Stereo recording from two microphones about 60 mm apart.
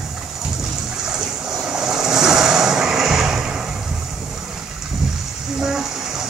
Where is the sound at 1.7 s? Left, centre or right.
Centre.